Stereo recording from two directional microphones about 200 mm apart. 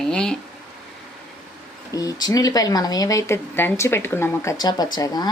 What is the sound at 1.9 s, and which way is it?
Speech, 20° left (ahead or behind).